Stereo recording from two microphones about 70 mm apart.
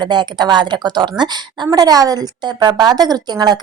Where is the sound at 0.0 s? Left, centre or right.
Right.